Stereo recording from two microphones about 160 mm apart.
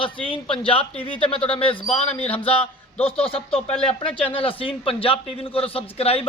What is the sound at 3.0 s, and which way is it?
A man's voice, 35° left (ahead or behind).